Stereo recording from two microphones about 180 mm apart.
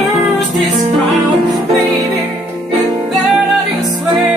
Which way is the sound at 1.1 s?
20° right (ahead or behind).